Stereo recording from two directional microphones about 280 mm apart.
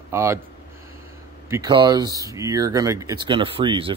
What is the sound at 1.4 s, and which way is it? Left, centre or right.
Speech, centre.